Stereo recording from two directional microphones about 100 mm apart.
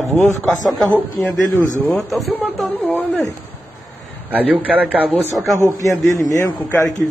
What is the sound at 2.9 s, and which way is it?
Speech, 15° left (ahead or behind).